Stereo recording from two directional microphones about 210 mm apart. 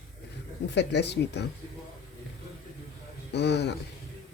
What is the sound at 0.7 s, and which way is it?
Speech, 55° left (ahead or behind).